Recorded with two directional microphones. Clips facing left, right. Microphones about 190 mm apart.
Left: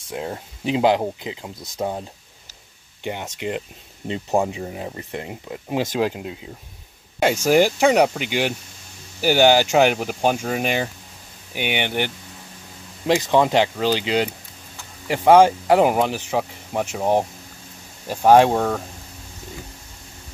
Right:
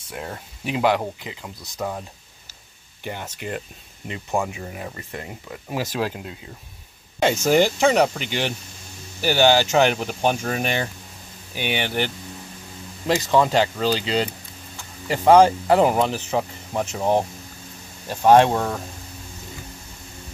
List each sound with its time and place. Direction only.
0.1 s speech: 20° left (ahead or behind)
4.1 s speech: 35° left (ahead or behind)
4.6 s speech: 20° left (ahead or behind)